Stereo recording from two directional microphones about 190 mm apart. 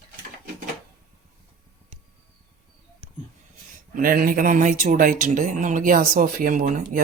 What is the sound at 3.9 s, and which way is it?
Speech, 50° right (ahead or behind).